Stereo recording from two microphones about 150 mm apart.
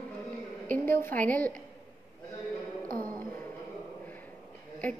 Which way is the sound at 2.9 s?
70° right (ahead or behind).